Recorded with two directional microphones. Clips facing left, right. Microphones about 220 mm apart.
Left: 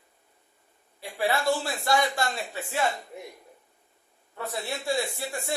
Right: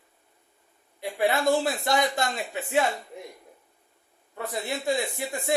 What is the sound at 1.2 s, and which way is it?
Speech, 20° right (ahead or behind).